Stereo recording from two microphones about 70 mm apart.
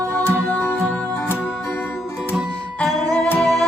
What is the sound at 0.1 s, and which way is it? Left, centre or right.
Music, left.